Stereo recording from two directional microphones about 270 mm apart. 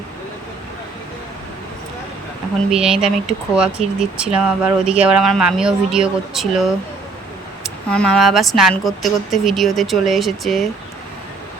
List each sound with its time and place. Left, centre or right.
2.6 s speech: centre